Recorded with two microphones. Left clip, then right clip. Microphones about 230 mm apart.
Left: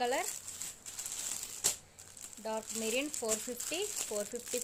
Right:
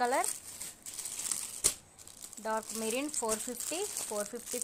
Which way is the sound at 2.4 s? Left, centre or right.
Centre.